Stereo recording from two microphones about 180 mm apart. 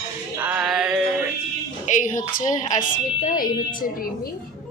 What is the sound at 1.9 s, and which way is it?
A woman's voice, 45° left (ahead or behind).